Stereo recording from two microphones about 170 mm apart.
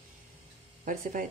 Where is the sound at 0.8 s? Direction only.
50° right (ahead or behind).